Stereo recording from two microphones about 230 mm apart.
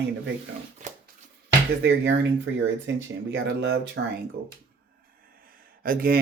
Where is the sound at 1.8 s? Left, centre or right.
Right.